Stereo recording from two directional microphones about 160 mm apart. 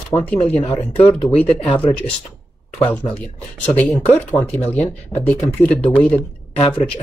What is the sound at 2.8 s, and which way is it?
Speech, 10° left (ahead or behind).